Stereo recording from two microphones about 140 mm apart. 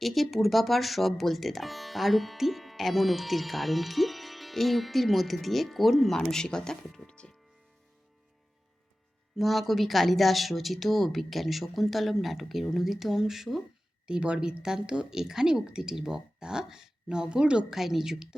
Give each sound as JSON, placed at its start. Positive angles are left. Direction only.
{"t": 0.0, "sound": "speech", "side_deg": 0}
{"t": 9.4, "sound": "speech", "side_deg": 0}